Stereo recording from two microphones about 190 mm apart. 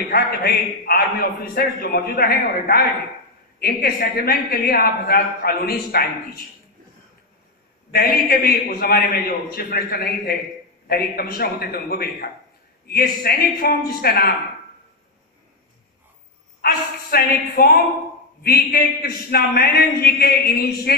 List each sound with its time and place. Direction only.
0.1 s a man's voice: 55° left (ahead or behind)
7.9 s a man's voice: 50° left (ahead or behind)
16.6 s a man's voice: 50° left (ahead or behind)